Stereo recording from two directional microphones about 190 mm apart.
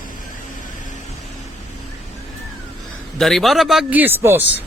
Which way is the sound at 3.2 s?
Centre (ahead or behind).